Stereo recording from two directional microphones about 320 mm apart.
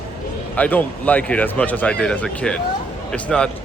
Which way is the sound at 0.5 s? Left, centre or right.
Centre.